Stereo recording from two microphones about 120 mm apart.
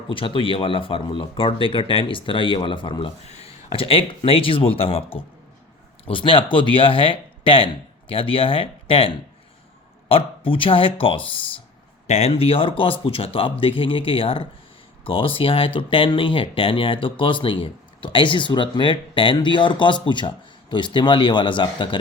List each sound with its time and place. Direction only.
0.1 s speech: 45° left (ahead or behind)
3.2 s speech: 60° left (ahead or behind); by 11.3 s 45° left (ahead or behind)
12.0 s speech: 65° left (ahead or behind); by 21.8 s 45° left (ahead or behind)